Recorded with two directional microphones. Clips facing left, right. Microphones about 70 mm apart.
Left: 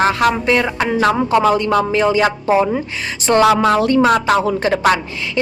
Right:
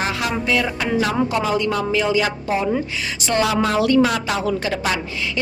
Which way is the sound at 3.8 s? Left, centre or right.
Left.